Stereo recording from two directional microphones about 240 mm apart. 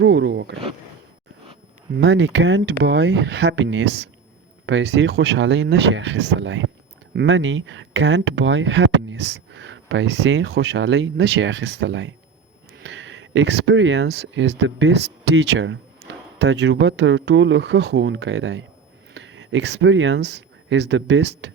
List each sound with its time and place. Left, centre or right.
0.0 s speech: right
2.0 s speech: right
16.0 s a sound: right
16.4 s speech: right